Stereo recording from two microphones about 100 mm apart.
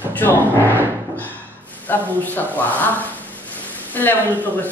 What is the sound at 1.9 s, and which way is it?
Speech, 20° left (ahead or behind).